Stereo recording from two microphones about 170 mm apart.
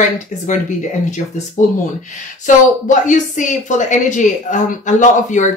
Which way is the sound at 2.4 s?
50° left (ahead or behind).